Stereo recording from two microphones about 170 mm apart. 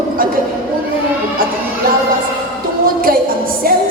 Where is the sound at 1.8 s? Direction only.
60° right (ahead or behind).